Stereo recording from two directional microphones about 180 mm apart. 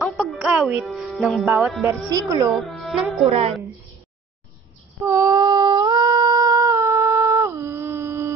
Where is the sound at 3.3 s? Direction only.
30° right (ahead or behind).